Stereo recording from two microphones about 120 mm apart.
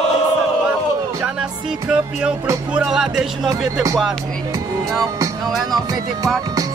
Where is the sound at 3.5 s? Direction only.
30° right (ahead or behind).